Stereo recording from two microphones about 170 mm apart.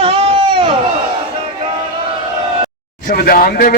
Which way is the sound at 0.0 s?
35° right (ahead or behind).